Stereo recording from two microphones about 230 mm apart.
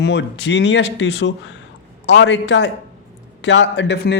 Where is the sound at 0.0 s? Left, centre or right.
Left.